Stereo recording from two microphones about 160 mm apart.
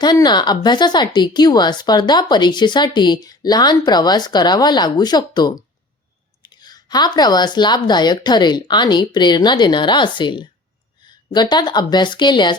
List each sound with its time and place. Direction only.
0.0 s speech: 25° left (ahead or behind)